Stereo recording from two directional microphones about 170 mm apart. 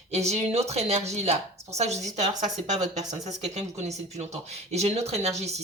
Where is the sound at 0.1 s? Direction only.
40° right (ahead or behind).